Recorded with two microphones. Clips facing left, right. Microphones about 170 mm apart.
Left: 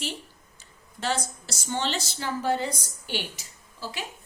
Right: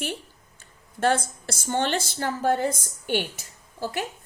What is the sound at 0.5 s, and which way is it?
A woman's voice, 55° right (ahead or behind).